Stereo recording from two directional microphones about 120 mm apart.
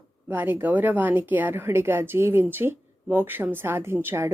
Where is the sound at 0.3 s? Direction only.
15° right (ahead or behind).